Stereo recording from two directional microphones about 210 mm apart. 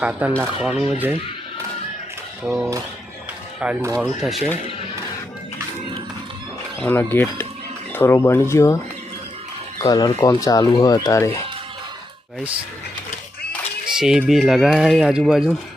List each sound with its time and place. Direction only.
0.0 s speech: 5° right (ahead or behind)
2.5 s speech: 15° right (ahead or behind)
6.7 s speech: 10° left (ahead or behind)
13.8 s speech: 5° right (ahead or behind)